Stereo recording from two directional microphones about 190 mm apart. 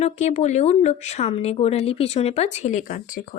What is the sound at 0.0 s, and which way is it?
Speech, 35° left (ahead or behind).